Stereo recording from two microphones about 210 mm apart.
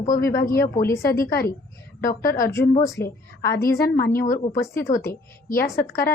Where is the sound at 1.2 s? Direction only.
45° left (ahead or behind).